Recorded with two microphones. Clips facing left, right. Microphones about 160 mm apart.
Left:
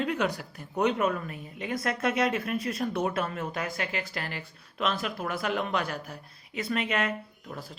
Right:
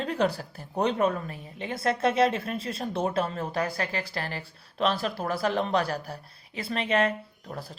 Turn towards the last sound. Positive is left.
turn(degrees=-40)  # may be behind; listen again after turning